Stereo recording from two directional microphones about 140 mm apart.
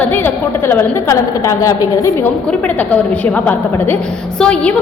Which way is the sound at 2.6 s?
10° left (ahead or behind).